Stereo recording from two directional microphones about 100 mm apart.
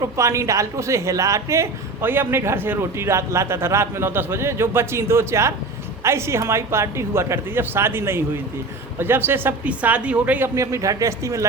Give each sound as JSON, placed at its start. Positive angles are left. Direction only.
{"t": 0.2, "sound": "speech", "side_deg": -30}
{"t": 10.5, "sound": "speech", "side_deg": -30}